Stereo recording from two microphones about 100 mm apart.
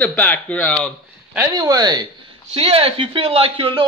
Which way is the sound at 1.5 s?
40° right (ahead or behind).